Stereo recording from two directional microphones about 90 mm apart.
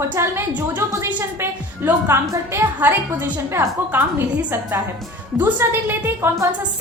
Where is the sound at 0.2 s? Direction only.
30° right (ahead or behind).